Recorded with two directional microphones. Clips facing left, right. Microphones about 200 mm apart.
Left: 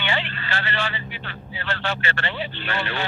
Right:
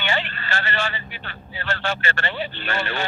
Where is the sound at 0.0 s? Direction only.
45° right (ahead or behind).